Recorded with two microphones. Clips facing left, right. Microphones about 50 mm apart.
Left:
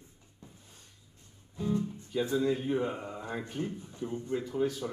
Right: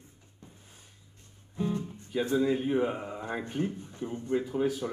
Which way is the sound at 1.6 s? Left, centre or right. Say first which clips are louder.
Even; right.